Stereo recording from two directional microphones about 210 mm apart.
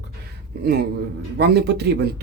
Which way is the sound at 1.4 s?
50° right (ahead or behind).